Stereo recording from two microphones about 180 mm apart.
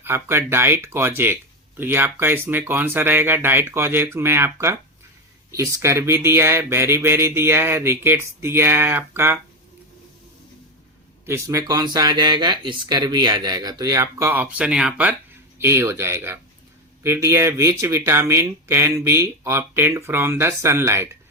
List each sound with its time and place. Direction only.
0.0 s speech: 15° right (ahead or behind)
11.3 s speech: 20° right (ahead or behind)